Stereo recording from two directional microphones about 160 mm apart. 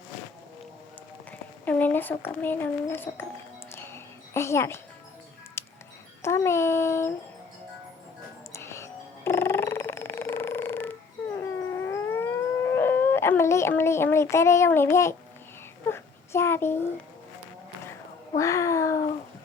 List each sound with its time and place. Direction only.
1.6 s speech: 10° left (ahead or behind)
3.8 s a sound: 15° left (ahead or behind)
5.6 s music: 15° left (ahead or behind)
6.2 s speech: 15° left (ahead or behind)
8.5 s music: 15° left (ahead or behind)
11.3 s howl: 15° left (ahead or behind)
15.9 s a sound: 15° left (ahead or behind)
18.3 s a child's voice: 20° left (ahead or behind)